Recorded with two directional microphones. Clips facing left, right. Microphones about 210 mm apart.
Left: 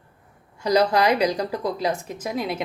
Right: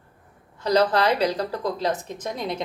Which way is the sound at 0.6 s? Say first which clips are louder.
Left 1 dB; 10° left (ahead or behind).